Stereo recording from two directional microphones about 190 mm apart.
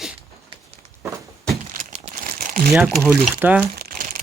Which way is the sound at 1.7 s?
40° right (ahead or behind).